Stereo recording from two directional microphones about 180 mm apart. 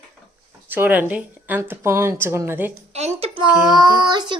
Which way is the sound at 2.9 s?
35° right (ahead or behind).